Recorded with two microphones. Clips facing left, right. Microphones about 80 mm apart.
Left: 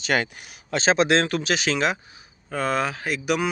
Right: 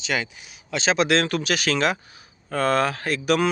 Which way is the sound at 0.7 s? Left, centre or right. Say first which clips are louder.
Left 1 dB; left.